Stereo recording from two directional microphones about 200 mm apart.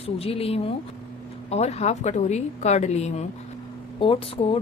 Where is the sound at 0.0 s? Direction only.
30° left (ahead or behind).